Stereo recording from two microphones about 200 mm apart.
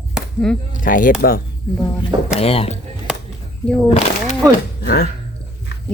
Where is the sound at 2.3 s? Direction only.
30° left (ahead or behind).